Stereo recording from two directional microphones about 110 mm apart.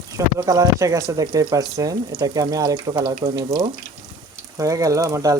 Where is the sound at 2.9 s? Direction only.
55° right (ahead or behind).